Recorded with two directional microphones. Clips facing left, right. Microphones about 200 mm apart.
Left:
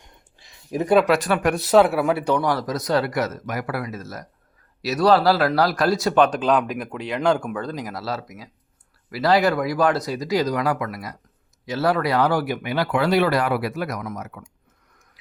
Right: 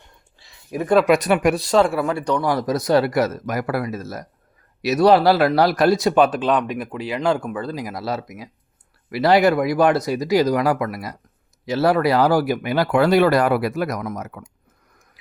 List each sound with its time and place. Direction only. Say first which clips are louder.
0.3 s a sound: left 1 dB; 20° left (ahead or behind)
1.0 s speech: right 3 dB; 15° right (ahead or behind)
1.5 s speech: left 1 dB; 5° left (ahead or behind)
2.6 s speech: right 4 dB; 30° right (ahead or behind)